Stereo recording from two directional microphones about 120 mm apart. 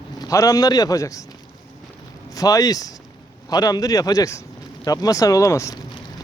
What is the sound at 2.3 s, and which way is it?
A man's voice, 30° left (ahead or behind).